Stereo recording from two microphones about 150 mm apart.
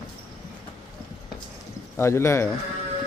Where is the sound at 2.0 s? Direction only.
15° left (ahead or behind).